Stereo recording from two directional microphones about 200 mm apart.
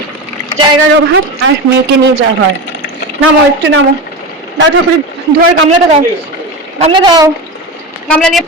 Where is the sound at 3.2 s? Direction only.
70° right (ahead or behind).